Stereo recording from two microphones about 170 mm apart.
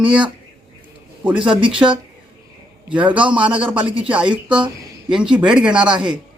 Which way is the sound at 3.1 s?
30° right (ahead or behind).